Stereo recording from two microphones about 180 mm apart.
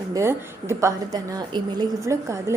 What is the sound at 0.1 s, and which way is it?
A woman's voice, 15° right (ahead or behind).